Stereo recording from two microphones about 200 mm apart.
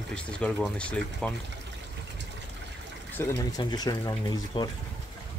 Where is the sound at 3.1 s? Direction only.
15° left (ahead or behind).